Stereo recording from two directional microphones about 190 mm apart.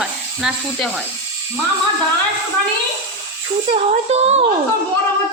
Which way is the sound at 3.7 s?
35° right (ahead or behind).